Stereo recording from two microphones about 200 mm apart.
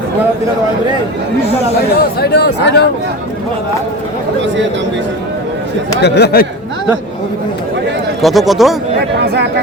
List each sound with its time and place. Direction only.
2.2 s speech: 55° left (ahead or behind)
6.0 s speech: 55° left (ahead or behind)
8.2 s speech: centre (ahead or behind)
9.2 s speech: 55° right (ahead or behind)